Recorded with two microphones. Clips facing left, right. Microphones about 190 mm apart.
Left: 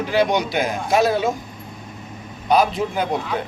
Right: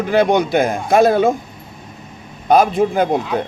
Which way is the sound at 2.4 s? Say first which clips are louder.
Right 5 dB; 50° right (ahead or behind).